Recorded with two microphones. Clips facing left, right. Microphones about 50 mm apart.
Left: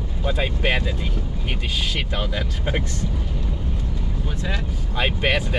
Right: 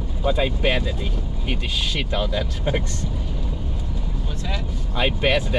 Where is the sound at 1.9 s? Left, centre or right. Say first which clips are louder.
Right 2 dB; centre.